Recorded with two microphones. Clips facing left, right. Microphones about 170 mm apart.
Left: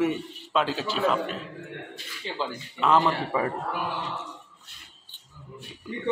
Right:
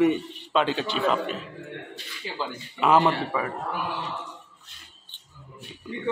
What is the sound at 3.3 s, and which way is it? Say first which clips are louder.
Speech: left 2 dB; 20° left (ahead or behind).